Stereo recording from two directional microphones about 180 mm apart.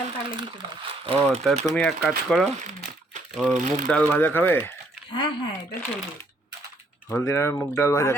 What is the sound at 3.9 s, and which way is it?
Speech, 10° left (ahead or behind).